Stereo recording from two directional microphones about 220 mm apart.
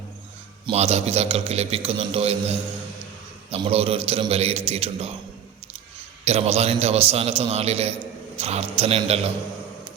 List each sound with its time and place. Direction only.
0.7 s a man's voice: 30° right (ahead or behind)
6.2 s a man's voice: 30° right (ahead or behind)